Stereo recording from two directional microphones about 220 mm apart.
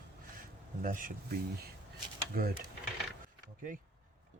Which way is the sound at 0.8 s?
40° right (ahead or behind).